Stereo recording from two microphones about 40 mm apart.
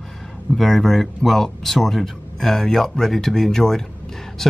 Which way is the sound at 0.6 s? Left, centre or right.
Centre.